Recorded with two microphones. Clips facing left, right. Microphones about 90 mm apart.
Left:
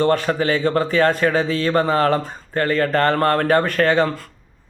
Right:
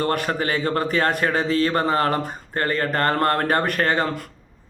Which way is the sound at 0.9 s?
20° right (ahead or behind).